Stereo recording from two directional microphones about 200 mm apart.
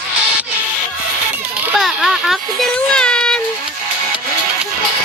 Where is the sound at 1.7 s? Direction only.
Centre (ahead or behind).